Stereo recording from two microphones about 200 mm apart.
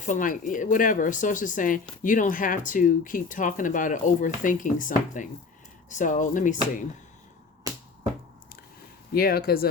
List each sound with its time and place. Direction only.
0.0 s speech: 40° left (ahead or behind)
9.1 s speech: 50° left (ahead or behind)